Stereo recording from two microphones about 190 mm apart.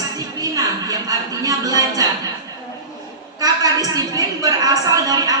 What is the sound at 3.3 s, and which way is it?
A woman's voice, 20° right (ahead or behind).